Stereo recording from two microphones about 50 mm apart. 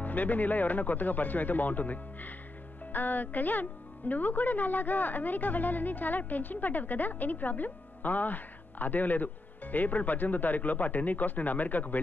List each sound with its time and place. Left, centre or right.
0.0 s a woman's voice: left